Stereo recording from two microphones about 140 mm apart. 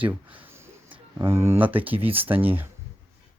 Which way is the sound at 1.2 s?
20° right (ahead or behind).